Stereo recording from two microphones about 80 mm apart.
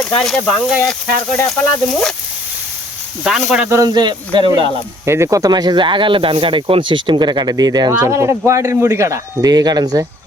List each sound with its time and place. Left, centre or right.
0.2 s speech: centre
0.4 s speech: centre
3.2 s speech: centre
3.8 s speech: right
5.0 s speech: right
5.5 s speech: right
8.0 s speech: right